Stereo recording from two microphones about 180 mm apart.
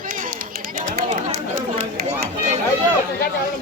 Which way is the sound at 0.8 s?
50° right (ahead or behind).